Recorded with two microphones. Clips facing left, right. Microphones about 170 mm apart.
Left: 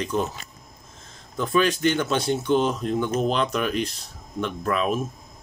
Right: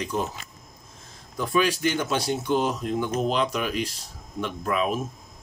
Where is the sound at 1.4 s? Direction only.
10° right (ahead or behind).